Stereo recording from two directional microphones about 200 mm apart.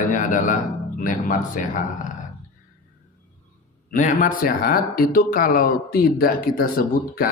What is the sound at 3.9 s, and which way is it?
Speech, 40° left (ahead or behind).